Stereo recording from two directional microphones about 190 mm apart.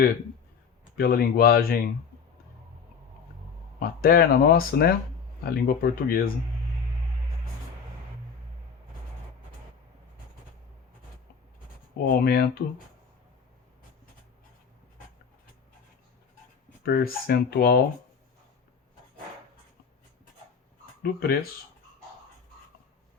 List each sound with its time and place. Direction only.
0.9 s speech: 50° left (ahead or behind)
3.8 s speech: 50° left (ahead or behind)
12.0 s speech: 50° left (ahead or behind)
16.8 s speech: 55° left (ahead or behind)
21.0 s speech: 55° left (ahead or behind)